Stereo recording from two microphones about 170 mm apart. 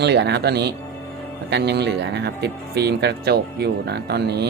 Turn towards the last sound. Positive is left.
turn(degrees=-70)  # may be behind; listen again after turning